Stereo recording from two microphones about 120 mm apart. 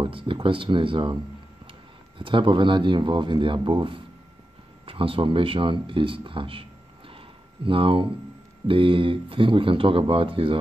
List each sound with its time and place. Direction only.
0.0 s a man's voice: 45° right (ahead or behind)